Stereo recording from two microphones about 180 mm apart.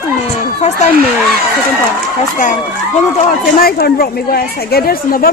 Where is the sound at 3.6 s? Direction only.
60° left (ahead or behind).